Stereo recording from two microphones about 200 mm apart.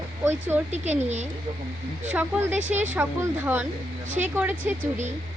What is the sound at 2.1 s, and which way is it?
Speech, 5° right (ahead or behind).